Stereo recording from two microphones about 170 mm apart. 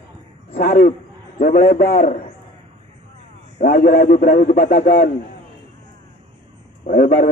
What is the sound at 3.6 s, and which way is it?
A man's voice, 60° left (ahead or behind).